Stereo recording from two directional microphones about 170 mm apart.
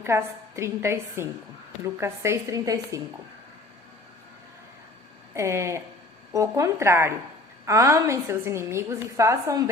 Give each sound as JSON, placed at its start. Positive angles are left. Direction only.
{"t": 0.0, "sound": "a woman's voice", "side_deg": -15}
{"t": 5.3, "sound": "a woman's voice", "side_deg": -15}